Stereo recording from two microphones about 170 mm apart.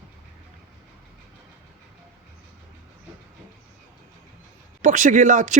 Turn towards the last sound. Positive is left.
turn(degrees=-50)  # may be behind; listen again after turning